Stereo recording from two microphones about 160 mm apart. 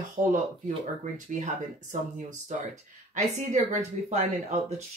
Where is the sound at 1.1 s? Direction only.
50° right (ahead or behind).